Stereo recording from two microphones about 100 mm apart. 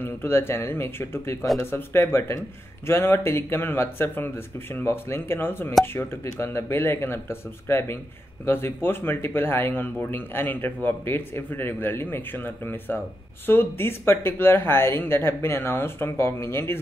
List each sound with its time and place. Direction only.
0.0 s speech: 25° left (ahead or behind)